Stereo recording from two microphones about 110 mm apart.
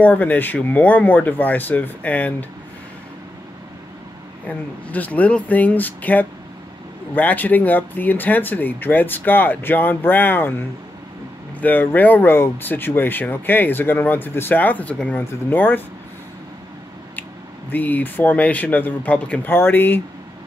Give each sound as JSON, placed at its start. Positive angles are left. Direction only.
{"t": 0.0, "sound": "speech", "side_deg": 15}
{"t": 4.5, "sound": "speech", "side_deg": 15}
{"t": 11.6, "sound": "speech", "side_deg": 15}
{"t": 17.6, "sound": "speech", "side_deg": 15}